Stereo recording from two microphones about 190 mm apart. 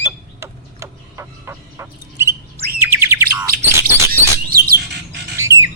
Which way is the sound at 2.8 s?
10° right (ahead or behind).